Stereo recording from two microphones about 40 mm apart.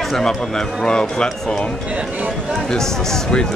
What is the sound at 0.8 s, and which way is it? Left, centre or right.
Speech, centre.